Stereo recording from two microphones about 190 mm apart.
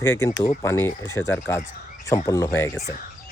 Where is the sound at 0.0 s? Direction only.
15° left (ahead or behind).